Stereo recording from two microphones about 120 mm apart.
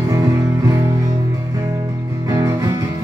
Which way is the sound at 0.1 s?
25° right (ahead or behind).